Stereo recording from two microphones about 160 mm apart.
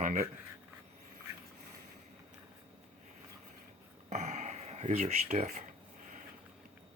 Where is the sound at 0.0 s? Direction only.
55° right (ahead or behind).